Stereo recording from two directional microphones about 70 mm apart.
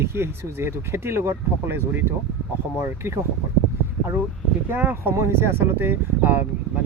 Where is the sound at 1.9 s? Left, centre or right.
Right.